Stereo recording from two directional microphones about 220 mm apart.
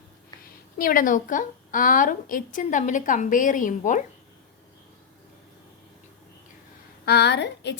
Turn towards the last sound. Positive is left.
turn(degrees=50)  # may be behind; listen again after turning